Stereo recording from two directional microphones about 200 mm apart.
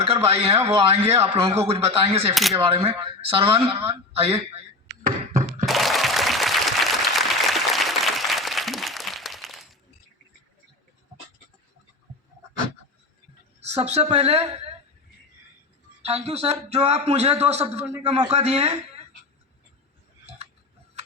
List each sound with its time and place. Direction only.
0.1 s a man's voice: 30° right (ahead or behind)
2.3 s speech: centre (ahead or behind)
2.6 s a woman's voice: 30° right (ahead or behind)
5.0 s a sound: 40° right (ahead or behind)
5.6 s applause: centre (ahead or behind)
13.7 s a woman's voice: 30° right (ahead or behind)
16.0 s a man's voice: 30° right (ahead or behind)